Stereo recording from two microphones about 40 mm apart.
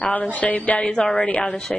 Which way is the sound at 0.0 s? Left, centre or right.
Left.